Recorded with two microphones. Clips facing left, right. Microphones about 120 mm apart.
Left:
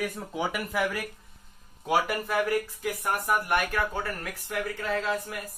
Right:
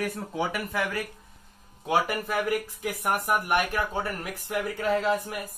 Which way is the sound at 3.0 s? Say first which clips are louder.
Right 2 dB; 20° right (ahead or behind).